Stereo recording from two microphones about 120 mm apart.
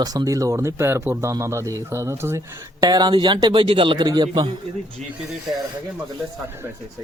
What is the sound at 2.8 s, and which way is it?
Speech, 35° right (ahead or behind).